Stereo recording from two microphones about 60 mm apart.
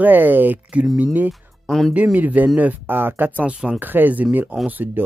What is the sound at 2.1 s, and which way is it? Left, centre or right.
Speech, right.